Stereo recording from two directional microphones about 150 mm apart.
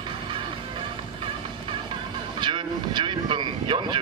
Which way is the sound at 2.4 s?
30° right (ahead or behind).